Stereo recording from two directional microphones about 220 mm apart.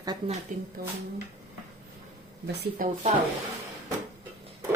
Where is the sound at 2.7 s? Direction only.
35° right (ahead or behind).